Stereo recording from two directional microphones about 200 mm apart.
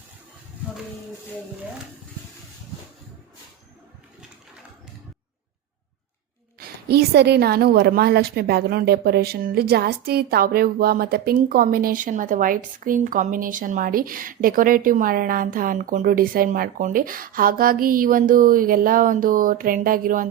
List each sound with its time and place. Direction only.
6.6 s a woman's voice: 50° right (ahead or behind)